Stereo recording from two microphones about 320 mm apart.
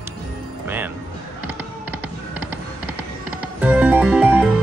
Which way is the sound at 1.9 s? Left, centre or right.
Left.